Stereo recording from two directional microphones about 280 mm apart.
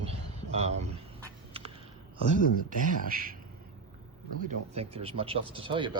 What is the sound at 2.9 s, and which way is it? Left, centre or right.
Speech, right.